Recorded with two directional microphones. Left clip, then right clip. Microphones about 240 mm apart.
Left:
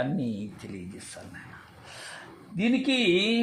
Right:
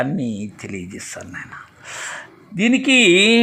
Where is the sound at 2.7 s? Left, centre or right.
Right.